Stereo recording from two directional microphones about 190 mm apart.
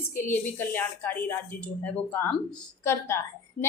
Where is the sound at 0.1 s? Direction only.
10° left (ahead or behind).